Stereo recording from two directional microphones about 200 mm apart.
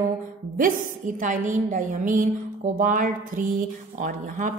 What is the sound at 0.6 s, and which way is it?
A woman's voice, 40° right (ahead or behind).